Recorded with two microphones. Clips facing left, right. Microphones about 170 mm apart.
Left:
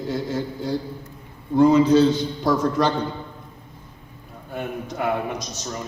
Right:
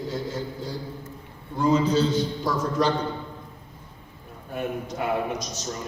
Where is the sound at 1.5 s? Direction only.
65° left (ahead or behind).